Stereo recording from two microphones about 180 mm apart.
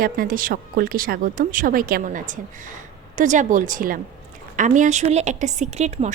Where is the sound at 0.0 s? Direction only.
50° right (ahead or behind).